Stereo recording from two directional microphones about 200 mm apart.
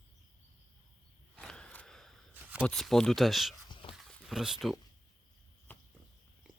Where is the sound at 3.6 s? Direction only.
25° left (ahead or behind).